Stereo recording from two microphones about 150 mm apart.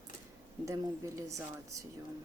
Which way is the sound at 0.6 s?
20° right (ahead or behind).